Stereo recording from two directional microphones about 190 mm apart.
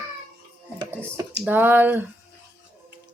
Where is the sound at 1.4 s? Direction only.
10° right (ahead or behind).